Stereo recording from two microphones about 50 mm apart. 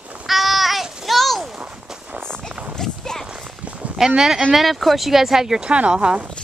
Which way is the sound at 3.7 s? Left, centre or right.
Right.